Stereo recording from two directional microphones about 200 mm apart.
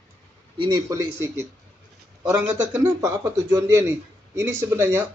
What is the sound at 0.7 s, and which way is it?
Speech, 20° right (ahead or behind).